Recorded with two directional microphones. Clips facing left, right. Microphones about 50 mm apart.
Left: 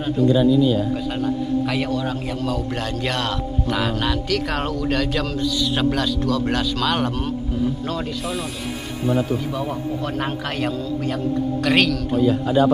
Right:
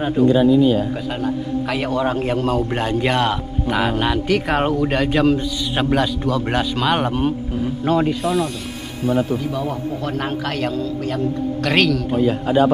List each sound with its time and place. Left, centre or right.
0.3 s speech: right
1.7 s a man's voice: centre
2.0 s a man's voice: right
2.7 s speech: right
8.2 s a man's voice: centre
9.5 s a man's voice: centre
12.2 s speech: right